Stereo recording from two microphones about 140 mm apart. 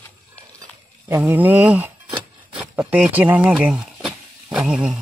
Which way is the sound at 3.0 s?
10° right (ahead or behind).